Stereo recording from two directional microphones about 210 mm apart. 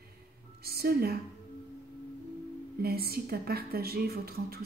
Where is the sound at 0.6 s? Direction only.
45° right (ahead or behind).